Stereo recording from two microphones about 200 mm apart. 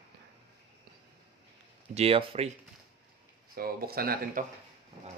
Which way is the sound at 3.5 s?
50° right (ahead or behind).